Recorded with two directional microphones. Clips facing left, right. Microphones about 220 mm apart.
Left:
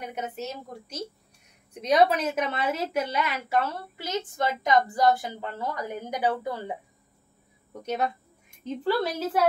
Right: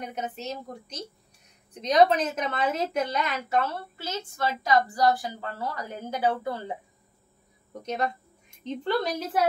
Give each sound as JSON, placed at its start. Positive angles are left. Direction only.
{"t": 0.0, "sound": "a woman's voice", "side_deg": 10}
{"t": 8.6, "sound": "a woman's voice", "side_deg": 5}